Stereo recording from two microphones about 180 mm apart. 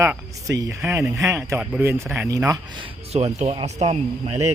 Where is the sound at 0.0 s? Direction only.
15° right (ahead or behind).